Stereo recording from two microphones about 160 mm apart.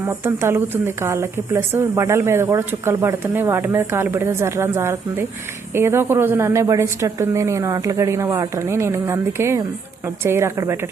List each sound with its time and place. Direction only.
0.0 s speech: 15° right (ahead or behind)